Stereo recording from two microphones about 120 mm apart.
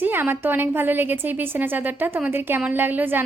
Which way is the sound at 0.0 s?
20° right (ahead or behind).